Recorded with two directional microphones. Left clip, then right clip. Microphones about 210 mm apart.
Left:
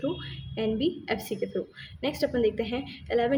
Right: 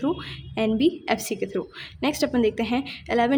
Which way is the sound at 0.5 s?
45° right (ahead or behind).